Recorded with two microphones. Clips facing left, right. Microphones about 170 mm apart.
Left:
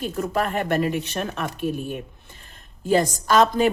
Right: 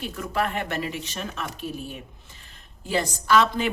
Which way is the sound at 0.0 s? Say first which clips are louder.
Left 3 dB; 45° left (ahead or behind).